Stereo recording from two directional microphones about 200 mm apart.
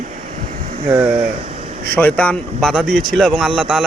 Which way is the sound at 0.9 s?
10° right (ahead or behind).